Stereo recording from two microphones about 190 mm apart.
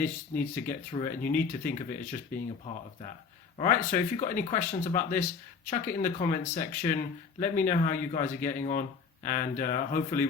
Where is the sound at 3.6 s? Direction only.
45° left (ahead or behind).